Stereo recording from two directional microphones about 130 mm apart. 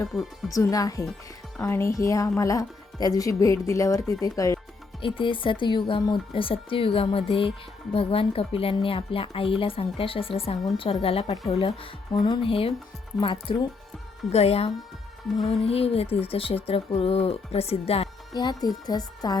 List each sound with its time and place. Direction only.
0.1 s speech: centre (ahead or behind)
0.5 s speech: 25° left (ahead or behind)
5.0 s a woman's voice: 40° left (ahead or behind)
12.1 s a woman's voice: 35° left (ahead or behind)
14.3 s a woman's voice: 50° left (ahead or behind)
18.3 s speech: 35° left (ahead or behind)